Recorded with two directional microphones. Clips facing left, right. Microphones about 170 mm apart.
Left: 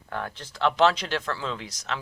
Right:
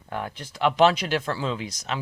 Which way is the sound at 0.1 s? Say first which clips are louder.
Right 1 dB; 15° right (ahead or behind).